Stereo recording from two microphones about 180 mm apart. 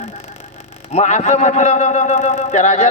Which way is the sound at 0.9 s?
40° left (ahead or behind).